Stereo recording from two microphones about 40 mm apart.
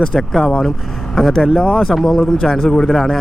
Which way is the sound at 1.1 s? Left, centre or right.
Centre.